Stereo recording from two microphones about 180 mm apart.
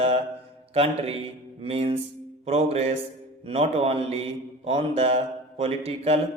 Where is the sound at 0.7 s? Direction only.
35° right (ahead or behind).